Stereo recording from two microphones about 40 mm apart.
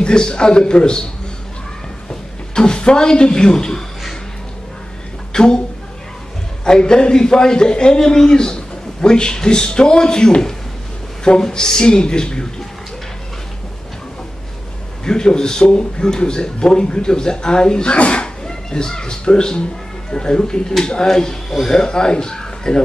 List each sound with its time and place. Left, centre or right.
0.0 s a man's voice: left
2.5 s a man's voice: left
5.3 s speech: centre
6.6 s a man's voice: centre
15.0 s a man's voice: centre
18.5 s a man's voice: centre